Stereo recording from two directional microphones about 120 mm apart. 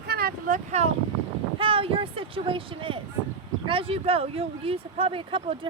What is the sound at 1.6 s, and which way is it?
Speech, 50° right (ahead or behind).